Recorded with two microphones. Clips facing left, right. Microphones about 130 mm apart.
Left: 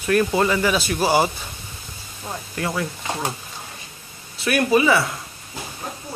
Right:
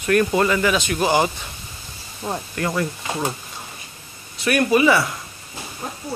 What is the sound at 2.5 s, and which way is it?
Speech, 5° left (ahead or behind).